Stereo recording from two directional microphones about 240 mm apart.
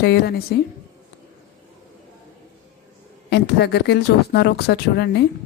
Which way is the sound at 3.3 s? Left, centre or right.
Left.